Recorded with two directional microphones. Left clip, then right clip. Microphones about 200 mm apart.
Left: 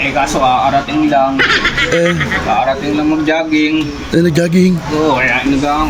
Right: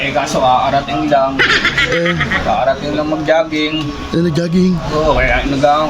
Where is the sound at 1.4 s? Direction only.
Centre (ahead or behind).